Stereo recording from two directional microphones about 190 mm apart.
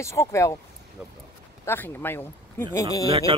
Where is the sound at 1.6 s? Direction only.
10° left (ahead or behind).